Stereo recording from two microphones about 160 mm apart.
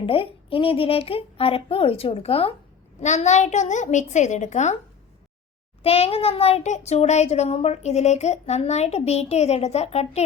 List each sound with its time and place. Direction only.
0.0 s speech: 35° left (ahead or behind)
3.0 s a child's voice: 45° left (ahead or behind)
5.8 s a child's voice: 40° left (ahead or behind)